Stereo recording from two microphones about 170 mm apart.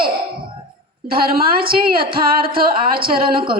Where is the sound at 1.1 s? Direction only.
60° right (ahead or behind).